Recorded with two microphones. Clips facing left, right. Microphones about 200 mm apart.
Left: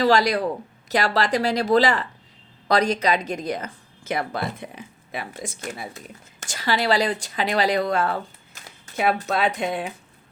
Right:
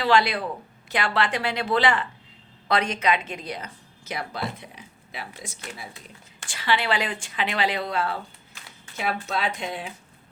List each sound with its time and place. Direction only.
0.0 s speech: 40° left (ahead or behind)